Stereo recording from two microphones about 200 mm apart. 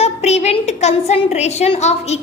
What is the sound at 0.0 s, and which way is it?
A woman's voice, 35° left (ahead or behind).